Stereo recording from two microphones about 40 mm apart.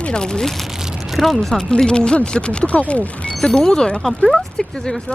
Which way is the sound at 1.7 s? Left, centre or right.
Left.